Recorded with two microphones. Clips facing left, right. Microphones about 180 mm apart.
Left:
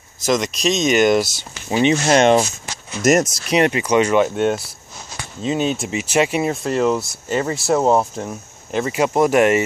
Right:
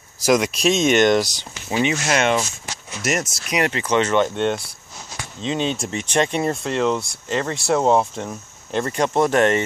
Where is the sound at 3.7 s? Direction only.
10° left (ahead or behind).